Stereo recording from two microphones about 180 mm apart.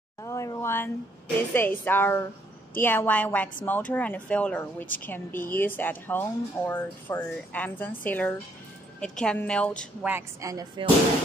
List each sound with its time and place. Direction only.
0.2 s a sound: 15° left (ahead or behind)
1.5 s a woman's voice: 10° left (ahead or behind)
10.0 s speech: 15° right (ahead or behind)